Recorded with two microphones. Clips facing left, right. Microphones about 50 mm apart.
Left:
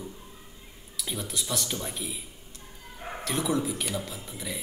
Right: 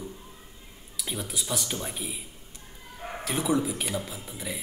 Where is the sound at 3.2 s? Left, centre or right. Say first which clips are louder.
Right 2 dB; centre.